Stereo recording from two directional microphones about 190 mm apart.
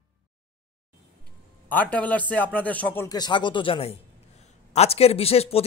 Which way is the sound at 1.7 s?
10° left (ahead or behind).